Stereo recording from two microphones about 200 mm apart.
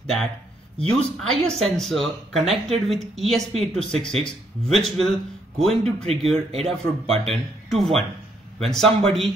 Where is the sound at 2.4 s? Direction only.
30° right (ahead or behind).